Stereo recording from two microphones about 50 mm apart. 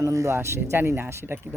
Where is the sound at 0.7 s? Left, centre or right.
Right.